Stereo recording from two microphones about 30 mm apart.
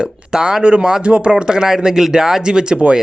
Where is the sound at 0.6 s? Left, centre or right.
Right.